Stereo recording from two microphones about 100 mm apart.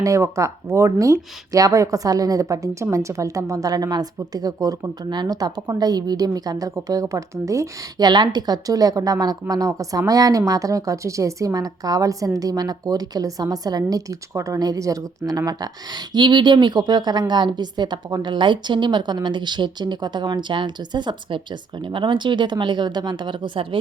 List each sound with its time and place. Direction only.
0.0 s speech: 30° right (ahead or behind); by 23.6 s 55° right (ahead or behind)